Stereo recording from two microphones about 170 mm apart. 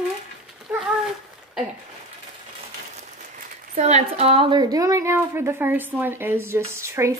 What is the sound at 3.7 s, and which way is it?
A woman's voice, 40° right (ahead or behind).